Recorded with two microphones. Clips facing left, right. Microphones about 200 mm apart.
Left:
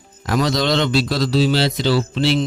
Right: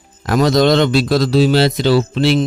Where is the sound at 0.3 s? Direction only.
50° right (ahead or behind).